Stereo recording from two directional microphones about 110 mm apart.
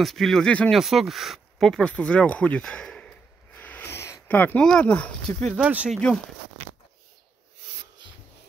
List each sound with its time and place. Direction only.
0.0 s speech: centre (ahead or behind)
3.5 s owl: 15° left (ahead or behind)
4.3 s speech: 15° left (ahead or behind)
5.5 s speech: 10° right (ahead or behind)